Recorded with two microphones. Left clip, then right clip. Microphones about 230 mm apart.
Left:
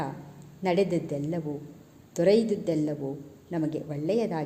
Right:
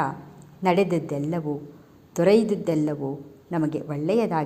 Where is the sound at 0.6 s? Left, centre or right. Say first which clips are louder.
Right 4 dB; right.